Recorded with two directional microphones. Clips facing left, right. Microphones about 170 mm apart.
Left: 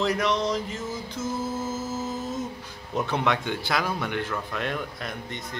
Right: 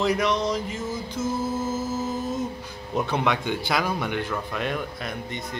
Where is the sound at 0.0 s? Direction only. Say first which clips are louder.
Right 2 dB; 10° right (ahead or behind).